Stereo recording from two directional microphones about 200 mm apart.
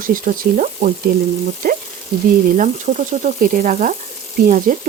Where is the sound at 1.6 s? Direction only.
50° right (ahead or behind).